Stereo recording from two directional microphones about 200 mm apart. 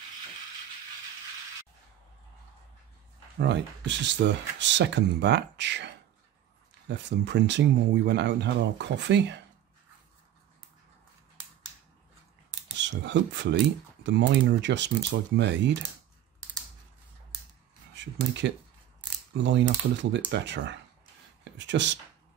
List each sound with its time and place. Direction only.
3.3 s speech: 60° right (ahead or behind)
12.8 s speech: 60° right (ahead or behind)
17.9 s speech: 60° right (ahead or behind)